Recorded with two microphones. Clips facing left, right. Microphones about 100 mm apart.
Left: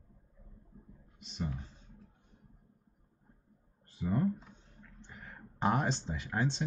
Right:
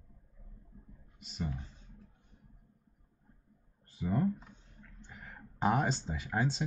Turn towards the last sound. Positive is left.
turn(degrees=-5)  # may be behind; listen again after turning